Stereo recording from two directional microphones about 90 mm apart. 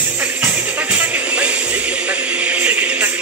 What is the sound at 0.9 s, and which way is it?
Music, 15° right (ahead or behind).